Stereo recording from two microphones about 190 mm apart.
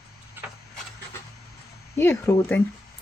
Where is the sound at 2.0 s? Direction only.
15° left (ahead or behind).